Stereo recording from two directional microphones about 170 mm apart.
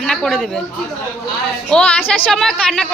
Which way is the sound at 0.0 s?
5° left (ahead or behind).